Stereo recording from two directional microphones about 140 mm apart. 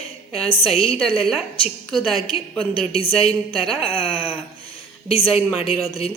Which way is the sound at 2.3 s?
45° left (ahead or behind).